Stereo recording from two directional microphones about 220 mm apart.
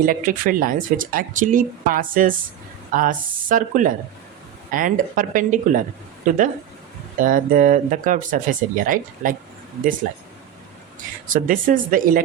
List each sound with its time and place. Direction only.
0.0 s speech: 40° right (ahead or behind)
11.3 s speech: 40° right (ahead or behind)